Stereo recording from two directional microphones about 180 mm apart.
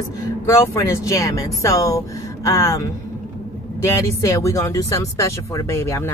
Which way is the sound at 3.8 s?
15° left (ahead or behind).